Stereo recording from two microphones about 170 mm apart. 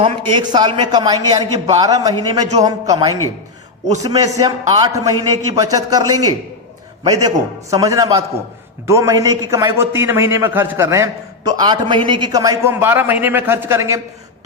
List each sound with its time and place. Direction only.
0.0 s a man's voice: 25° right (ahead or behind)